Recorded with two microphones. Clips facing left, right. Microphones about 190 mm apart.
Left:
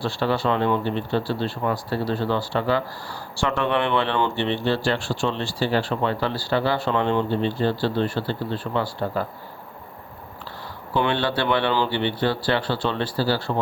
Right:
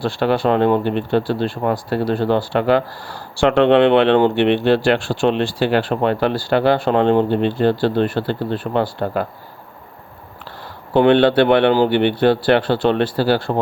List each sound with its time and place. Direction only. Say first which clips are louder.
0.0 s speech: right 6 dB; 55° right (ahead or behind)
10.9 s speech: right 11 dB; 60° right (ahead or behind)